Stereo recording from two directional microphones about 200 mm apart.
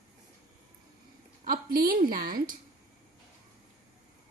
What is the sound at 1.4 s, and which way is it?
A woman's voice, 45° right (ahead or behind).